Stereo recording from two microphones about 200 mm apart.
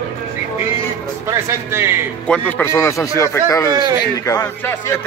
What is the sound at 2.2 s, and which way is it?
A man's voice, 5° left (ahead or behind).